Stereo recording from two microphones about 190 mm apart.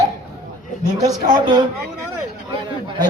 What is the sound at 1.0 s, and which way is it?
Speech, 20° right (ahead or behind).